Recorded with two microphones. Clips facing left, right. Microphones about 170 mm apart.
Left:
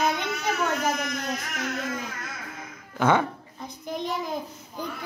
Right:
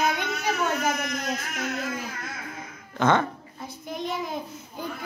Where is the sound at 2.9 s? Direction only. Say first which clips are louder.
Even; 10° left (ahead or behind).